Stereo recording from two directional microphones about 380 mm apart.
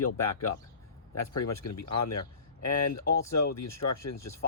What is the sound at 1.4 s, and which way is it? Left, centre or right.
Speech, left.